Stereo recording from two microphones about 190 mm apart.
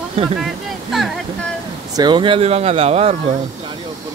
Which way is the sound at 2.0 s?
25° right (ahead or behind).